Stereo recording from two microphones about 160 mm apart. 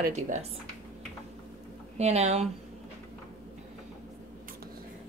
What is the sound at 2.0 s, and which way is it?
Speech, 45° right (ahead or behind).